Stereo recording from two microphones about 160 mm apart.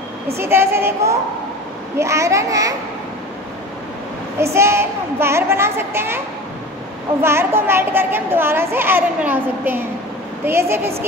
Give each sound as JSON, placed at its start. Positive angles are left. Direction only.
{"t": 0.4, "sound": "a woman's voice", "side_deg": -15}
{"t": 4.6, "sound": "a woman's voice", "side_deg": -15}